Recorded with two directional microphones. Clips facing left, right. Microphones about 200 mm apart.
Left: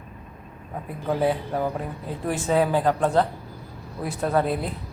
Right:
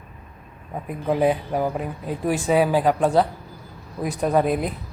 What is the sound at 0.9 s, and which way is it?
Speech, 15° right (ahead or behind).